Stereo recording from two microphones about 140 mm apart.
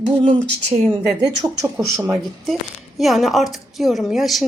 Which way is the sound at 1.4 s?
20° right (ahead or behind).